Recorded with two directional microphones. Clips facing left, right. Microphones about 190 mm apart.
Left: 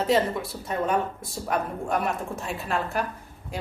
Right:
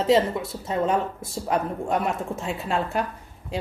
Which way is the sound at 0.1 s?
25° right (ahead or behind).